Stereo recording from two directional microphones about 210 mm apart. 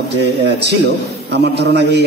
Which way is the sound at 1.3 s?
55° right (ahead or behind).